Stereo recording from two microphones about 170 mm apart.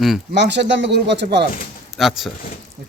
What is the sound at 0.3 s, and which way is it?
Speech, 90° right.